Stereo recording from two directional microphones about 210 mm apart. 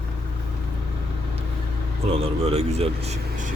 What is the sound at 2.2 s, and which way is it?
Speech, 30° right (ahead or behind).